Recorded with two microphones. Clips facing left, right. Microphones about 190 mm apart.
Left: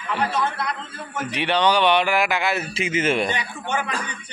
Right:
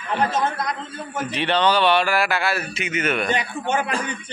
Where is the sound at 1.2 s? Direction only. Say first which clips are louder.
Even; 15° left (ahead or behind).